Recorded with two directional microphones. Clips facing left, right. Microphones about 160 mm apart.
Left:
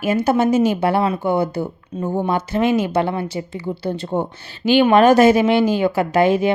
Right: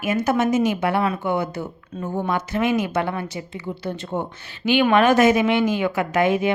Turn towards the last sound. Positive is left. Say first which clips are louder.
# left 4 dB
turn(degrees=30)  # may be behind; listen again after turning